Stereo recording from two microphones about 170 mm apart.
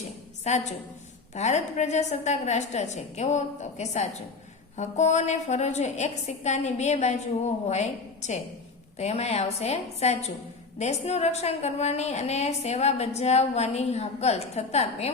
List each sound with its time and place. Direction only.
1.3 s a woman's voice: 45° left (ahead or behind)